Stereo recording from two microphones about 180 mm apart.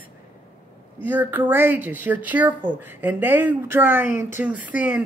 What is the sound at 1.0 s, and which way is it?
Speech, 10° right (ahead or behind).